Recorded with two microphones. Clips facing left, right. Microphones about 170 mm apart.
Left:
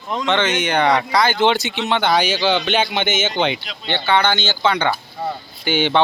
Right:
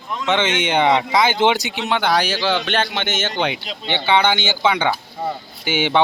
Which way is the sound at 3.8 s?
15° right (ahead or behind).